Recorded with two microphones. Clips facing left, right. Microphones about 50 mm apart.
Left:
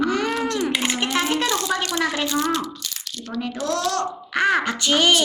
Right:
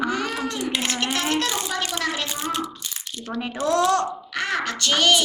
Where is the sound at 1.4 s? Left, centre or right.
Right.